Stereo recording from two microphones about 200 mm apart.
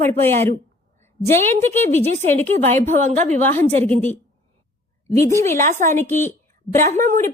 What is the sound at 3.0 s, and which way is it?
Speech, 35° right (ahead or behind).